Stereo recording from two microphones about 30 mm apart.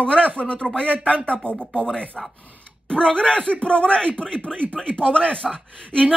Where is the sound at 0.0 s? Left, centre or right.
Left.